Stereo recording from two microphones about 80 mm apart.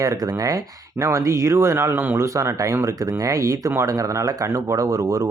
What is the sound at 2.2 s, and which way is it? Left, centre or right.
Speech, right.